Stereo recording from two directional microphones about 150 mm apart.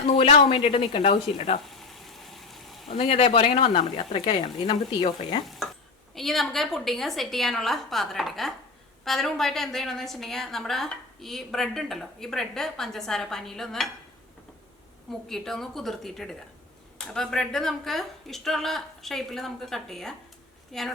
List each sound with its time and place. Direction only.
0.1 s speech: 45° left (ahead or behind)
1.6 s frying: centre (ahead or behind)
2.9 s speech: 40° left (ahead or behind)
6.1 s a woman's voice: centre (ahead or behind)
15.3 s a woman's voice: centre (ahead or behind)